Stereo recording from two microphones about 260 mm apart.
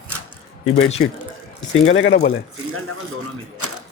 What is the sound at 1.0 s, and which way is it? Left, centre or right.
Speech, left.